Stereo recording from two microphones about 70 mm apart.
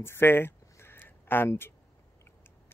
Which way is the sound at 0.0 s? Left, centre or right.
Left.